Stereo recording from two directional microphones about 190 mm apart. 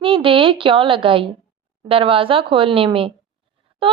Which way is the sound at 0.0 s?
25° right (ahead or behind).